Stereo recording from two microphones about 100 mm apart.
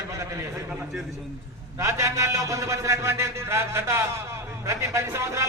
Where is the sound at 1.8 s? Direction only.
30° right (ahead or behind).